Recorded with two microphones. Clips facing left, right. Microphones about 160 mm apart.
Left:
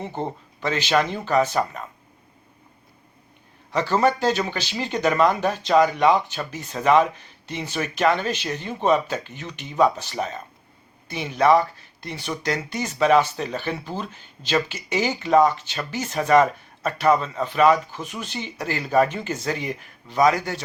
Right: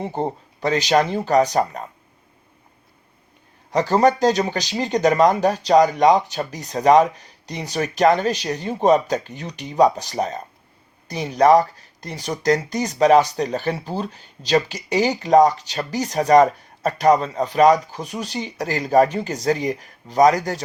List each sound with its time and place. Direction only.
0.0 s speech: 35° right (ahead or behind)
3.7 s speech: 40° right (ahead or behind)